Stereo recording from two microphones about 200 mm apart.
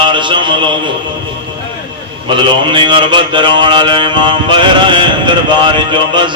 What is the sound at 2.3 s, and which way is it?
Mantra, 25° right (ahead or behind).